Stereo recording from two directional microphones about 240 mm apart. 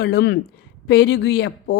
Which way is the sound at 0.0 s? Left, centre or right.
Left.